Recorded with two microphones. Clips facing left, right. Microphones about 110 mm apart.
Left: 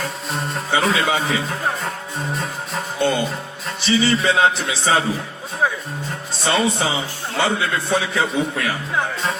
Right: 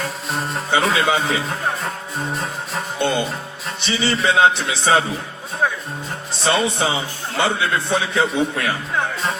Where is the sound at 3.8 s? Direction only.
30° right (ahead or behind).